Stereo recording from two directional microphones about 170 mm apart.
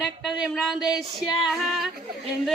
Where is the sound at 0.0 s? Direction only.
5° right (ahead or behind).